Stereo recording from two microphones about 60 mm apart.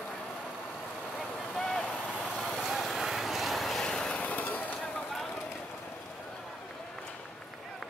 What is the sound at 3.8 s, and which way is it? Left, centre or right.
Vehicle, centre.